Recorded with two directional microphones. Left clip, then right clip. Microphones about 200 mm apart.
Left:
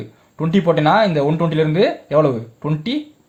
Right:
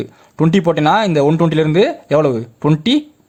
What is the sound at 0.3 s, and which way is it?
Speech, 40° right (ahead or behind).